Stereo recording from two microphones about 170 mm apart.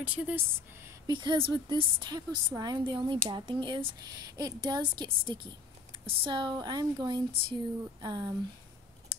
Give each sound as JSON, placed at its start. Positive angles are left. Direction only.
{"t": 0.0, "sound": "speech", "side_deg": -10}
{"t": 1.0, "sound": "a woman's voice", "side_deg": -25}